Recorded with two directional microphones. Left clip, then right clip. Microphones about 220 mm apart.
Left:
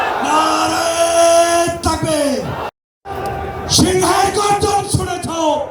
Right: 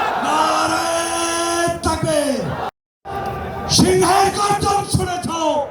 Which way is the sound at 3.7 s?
15° left (ahead or behind).